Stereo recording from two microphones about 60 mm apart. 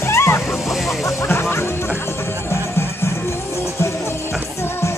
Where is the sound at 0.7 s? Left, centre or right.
Centre.